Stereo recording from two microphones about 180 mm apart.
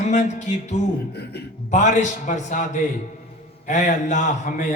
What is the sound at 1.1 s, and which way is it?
Speech, 65° left (ahead or behind).